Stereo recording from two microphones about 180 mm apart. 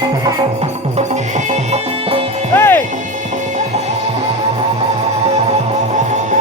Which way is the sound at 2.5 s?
15° left (ahead or behind).